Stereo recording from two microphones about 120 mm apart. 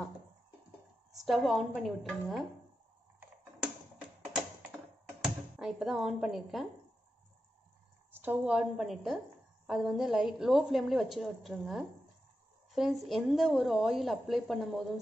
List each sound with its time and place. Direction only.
1.2 s a woman's voice: centre (ahead or behind)
5.2 s speech: 5° right (ahead or behind)
8.1 s a woman's voice: 15° right (ahead or behind)
8.5 s a woman's voice: 5° right (ahead or behind)